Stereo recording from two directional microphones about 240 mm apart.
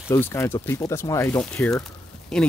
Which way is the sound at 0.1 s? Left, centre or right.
Centre.